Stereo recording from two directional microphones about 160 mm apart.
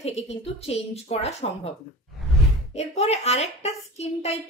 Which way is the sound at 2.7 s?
45° left (ahead or behind).